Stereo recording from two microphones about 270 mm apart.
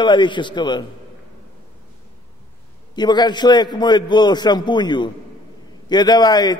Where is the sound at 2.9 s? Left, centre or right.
Centre.